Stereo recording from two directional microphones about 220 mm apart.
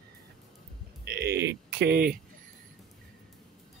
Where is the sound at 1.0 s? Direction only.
50° right (ahead or behind).